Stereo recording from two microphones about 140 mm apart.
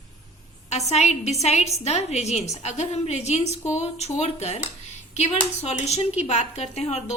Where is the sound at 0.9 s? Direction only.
50° left (ahead or behind).